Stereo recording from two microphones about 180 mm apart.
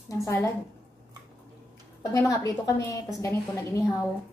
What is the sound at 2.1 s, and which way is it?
A woman's voice, 20° left (ahead or behind).